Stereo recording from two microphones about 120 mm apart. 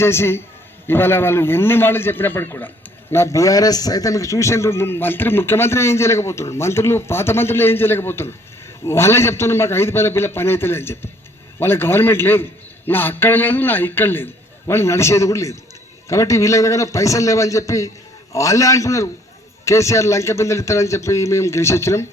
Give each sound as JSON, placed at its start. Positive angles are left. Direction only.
{"t": 0.0, "sound": "a man's voice", "side_deg": 20}